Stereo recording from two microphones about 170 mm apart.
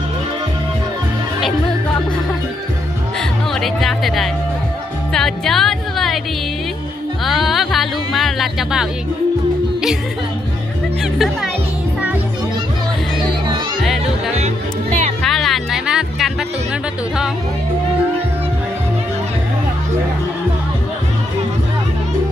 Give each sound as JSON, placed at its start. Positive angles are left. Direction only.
{"t": 3.6, "sound": "speech", "side_deg": 0}
{"t": 5.1, "sound": "music", "side_deg": 0}
{"t": 7.2, "sound": "speech", "side_deg": 0}
{"t": 14.3, "sound": "speech", "side_deg": -40}
{"t": 15.2, "sound": "music", "side_deg": 0}